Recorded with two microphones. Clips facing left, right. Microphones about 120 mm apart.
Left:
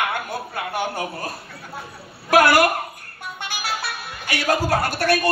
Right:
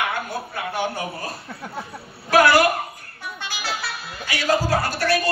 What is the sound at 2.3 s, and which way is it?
A woman's voice, 55° left (ahead or behind).